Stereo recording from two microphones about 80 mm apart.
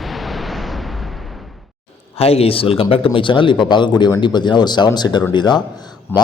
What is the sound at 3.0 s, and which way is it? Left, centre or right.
A man's voice, left.